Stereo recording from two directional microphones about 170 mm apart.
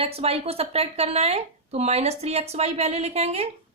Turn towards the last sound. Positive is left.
turn(degrees=-40)  # may be behind; listen again after turning